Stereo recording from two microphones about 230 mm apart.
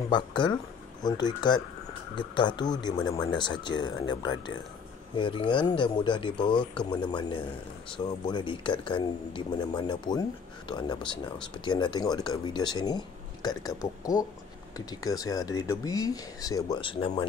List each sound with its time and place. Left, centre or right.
0.1 s speech: centre